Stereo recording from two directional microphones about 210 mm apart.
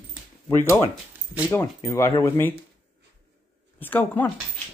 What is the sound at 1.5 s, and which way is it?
Speech, 10° left (ahead or behind).